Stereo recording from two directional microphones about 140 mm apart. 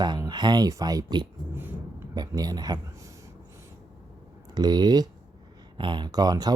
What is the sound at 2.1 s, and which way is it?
Speech, 25° right (ahead or behind).